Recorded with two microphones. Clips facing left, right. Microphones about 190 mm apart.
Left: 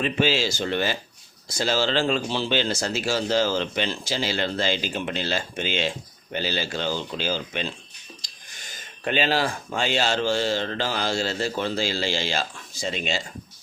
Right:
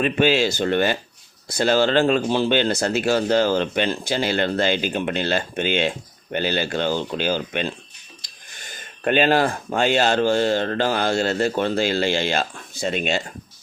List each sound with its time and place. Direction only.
0.0 s speech: 55° right (ahead or behind)
9.0 s speech: 55° right (ahead or behind)